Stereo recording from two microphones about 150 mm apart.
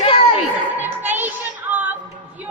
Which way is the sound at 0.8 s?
10° right (ahead or behind).